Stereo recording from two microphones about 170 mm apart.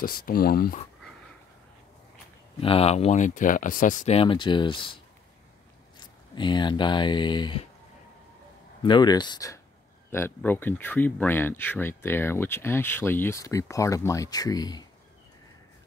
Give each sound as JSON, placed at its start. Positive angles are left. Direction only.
{"t": 0.0, "sound": "speech", "side_deg": 60}
{"t": 2.6, "sound": "speech", "side_deg": 35}
{"t": 5.9, "sound": "speech", "side_deg": 25}
{"t": 8.8, "sound": "speech", "side_deg": 25}